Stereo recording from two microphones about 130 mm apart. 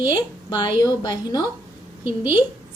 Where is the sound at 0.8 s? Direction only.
30° left (ahead or behind).